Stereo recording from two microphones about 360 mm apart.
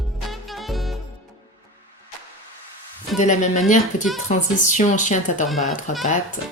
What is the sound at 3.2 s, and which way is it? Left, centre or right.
A woman's voice, centre.